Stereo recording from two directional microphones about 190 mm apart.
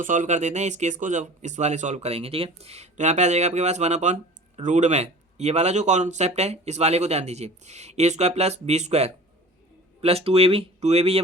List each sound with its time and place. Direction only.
0.0 s speech: 40° right (ahead or behind)